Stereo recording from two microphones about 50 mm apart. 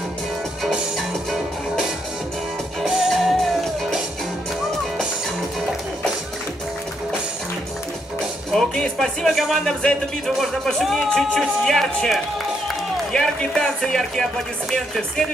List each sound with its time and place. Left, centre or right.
0.7 s music: centre
8.5 s speech: centre